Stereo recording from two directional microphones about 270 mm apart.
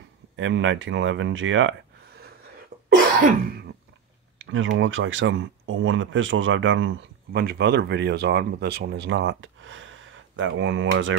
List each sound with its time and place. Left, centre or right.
0.4 s speech: right
4.4 s speech: right